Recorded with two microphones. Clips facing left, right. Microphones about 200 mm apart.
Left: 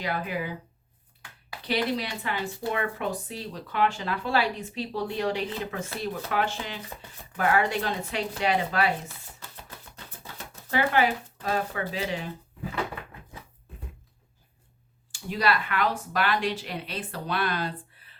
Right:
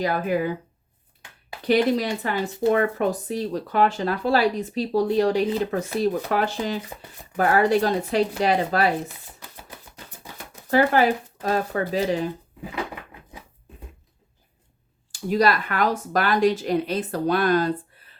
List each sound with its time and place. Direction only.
0.0 s speech: 45° right (ahead or behind)
1.6 s speech: 45° right (ahead or behind)
9.0 s a sound: 15° right (ahead or behind)
10.7 s speech: 40° right (ahead or behind)
15.3 s speech: 40° right (ahead or behind)